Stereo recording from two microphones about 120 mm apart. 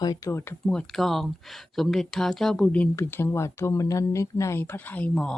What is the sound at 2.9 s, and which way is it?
Speech, 20° left (ahead or behind).